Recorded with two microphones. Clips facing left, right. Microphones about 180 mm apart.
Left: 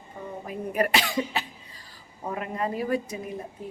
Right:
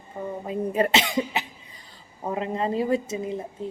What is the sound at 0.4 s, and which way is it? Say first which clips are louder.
Speech: right 3 dB; 25° right (ahead or behind).